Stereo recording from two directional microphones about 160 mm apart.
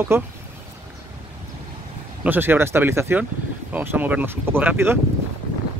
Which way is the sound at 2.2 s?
10° right (ahead or behind).